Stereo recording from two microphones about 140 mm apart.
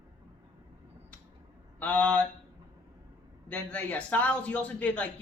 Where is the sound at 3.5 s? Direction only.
10° left (ahead or behind).